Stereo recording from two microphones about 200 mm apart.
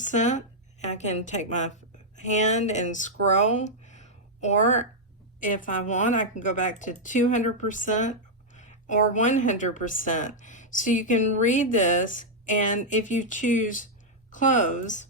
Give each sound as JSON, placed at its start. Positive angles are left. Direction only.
{"t": 0.0, "sound": "a woman's voice", "side_deg": 40}